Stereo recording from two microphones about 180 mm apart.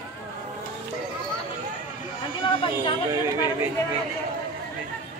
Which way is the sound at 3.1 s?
15° right (ahead or behind).